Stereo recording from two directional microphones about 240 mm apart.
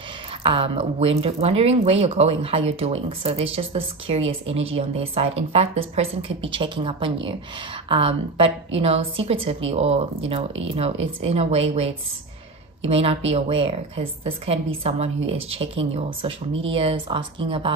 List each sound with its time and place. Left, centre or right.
0.4 s a woman's voice: right